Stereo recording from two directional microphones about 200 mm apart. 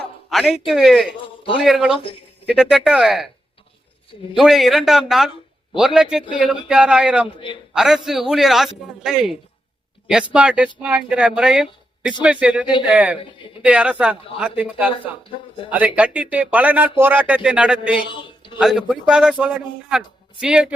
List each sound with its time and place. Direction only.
0.3 s a man's voice: centre (ahead or behind)
4.4 s a man's voice: centre (ahead or behind)
7.3 s a man's voice: 25° left (ahead or behind)
7.7 s a man's voice: 5° right (ahead or behind)